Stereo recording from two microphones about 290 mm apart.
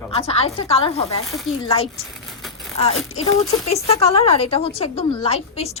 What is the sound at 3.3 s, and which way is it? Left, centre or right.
A woman's voice, centre.